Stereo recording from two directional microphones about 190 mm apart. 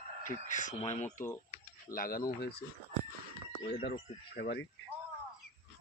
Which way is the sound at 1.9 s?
50° left (ahead or behind).